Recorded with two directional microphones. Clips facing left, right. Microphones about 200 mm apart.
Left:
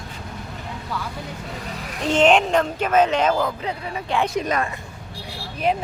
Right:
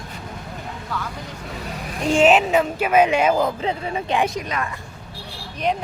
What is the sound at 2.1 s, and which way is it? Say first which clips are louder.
Speech: right 1 dB; 5° right (ahead or behind).